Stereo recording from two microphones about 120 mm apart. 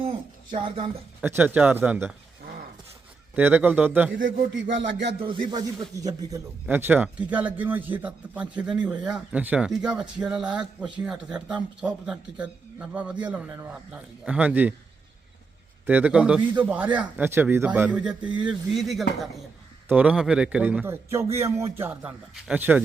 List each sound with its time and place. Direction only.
0.0 s a sound: 50° right (ahead or behind)
1.2 s a man's voice: 15° right (ahead or behind)
3.3 s a man's voice: 15° right (ahead or behind)
5.2 s music: 45° right (ahead or behind)
6.0 s a man's voice: 30° right (ahead or behind)
6.7 s a man's voice: 15° right (ahead or behind)
15.9 s a man's voice: 10° right (ahead or behind)